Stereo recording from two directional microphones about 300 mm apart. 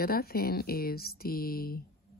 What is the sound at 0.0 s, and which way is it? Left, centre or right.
Speech, left.